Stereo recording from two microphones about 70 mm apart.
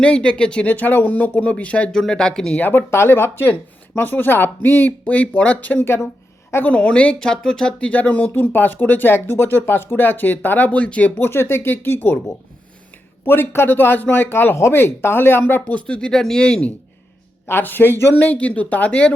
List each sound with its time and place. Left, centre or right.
0.0 s speech: centre
0.7 s speech: left; by 2.6 s centre
2.6 s speech: left
5.8 s speech: left
6.7 s speech: centre
11.2 s speech: left
13.2 s speech: left; by 16.6 s centre
17.4 s speech: left